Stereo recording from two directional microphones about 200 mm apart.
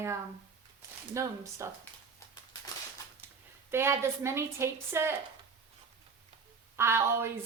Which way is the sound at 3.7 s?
15° right (ahead or behind).